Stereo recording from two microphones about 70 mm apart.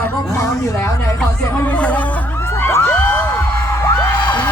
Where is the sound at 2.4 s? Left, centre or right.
Left.